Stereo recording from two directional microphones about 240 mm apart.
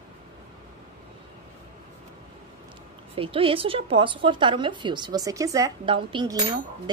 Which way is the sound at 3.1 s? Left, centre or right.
Right.